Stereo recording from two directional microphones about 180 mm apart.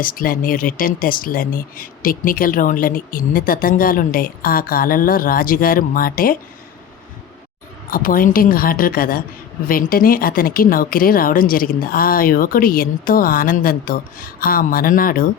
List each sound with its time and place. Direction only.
0.0 s speech: 50° left (ahead or behind)
7.9 s speech: 50° left (ahead or behind)